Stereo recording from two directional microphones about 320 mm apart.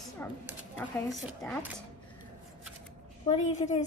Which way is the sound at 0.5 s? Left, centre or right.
Centre.